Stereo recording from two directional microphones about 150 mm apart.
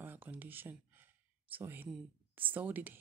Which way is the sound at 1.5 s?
15° right (ahead or behind).